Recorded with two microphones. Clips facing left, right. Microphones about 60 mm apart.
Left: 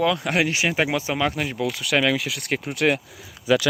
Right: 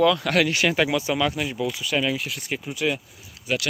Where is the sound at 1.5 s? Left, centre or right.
Left.